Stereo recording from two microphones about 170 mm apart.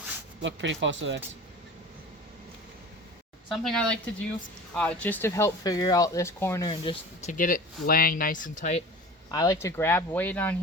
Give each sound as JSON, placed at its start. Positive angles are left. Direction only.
{"t": 0.4, "sound": "speech", "side_deg": -90}
{"t": 3.5, "sound": "speech", "side_deg": 0}
{"t": 6.7, "sound": "speech", "side_deg": 30}
{"t": 7.3, "sound": "speech", "side_deg": 50}
{"t": 9.3, "sound": "speech", "side_deg": 20}